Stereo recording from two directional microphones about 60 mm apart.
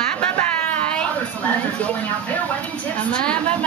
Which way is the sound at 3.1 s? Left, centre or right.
Centre.